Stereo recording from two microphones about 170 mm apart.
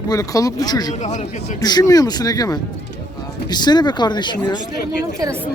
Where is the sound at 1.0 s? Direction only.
40° left (ahead or behind).